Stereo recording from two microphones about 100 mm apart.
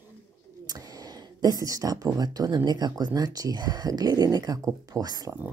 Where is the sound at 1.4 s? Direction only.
35° right (ahead or behind).